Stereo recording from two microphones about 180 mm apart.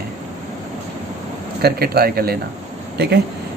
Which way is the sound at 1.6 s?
60° right (ahead or behind).